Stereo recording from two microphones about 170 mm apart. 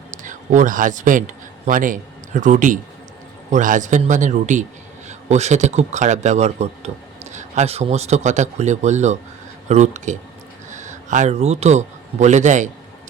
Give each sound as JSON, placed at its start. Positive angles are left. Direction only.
{"t": 0.1, "sound": "a man's voice", "side_deg": -50}